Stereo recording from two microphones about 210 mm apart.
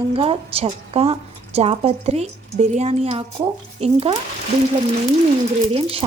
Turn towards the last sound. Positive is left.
turn(degrees=-25)  # may be behind; listen again after turning